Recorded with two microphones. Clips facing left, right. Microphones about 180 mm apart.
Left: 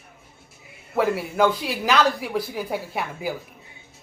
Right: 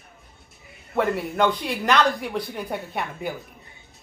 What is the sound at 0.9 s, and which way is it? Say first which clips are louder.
A woman's voice: left 1 dB; centre (ahead or behind).